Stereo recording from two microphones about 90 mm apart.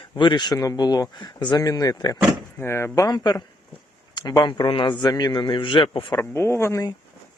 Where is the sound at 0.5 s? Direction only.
45° left (ahead or behind); by 1.6 s 60° left (ahead or behind).